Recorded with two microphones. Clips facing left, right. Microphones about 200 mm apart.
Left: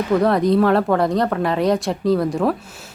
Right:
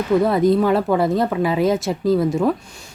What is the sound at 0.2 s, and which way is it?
Speech, centre (ahead or behind).